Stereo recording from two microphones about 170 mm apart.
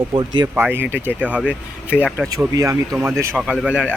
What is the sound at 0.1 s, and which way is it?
Speech, 30° right (ahead or behind).